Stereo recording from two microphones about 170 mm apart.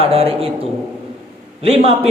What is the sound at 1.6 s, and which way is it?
Speech, 35° right (ahead or behind).